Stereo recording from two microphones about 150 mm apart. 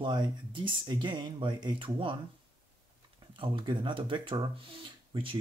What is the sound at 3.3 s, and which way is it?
Speech, 35° right (ahead or behind).